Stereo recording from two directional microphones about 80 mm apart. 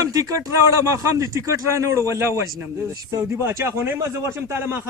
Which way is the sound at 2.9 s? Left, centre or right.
Right.